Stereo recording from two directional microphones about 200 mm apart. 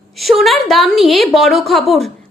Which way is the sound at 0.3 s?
Centre (ahead or behind).